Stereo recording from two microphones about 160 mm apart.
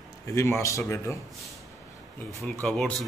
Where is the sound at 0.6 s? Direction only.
20° left (ahead or behind).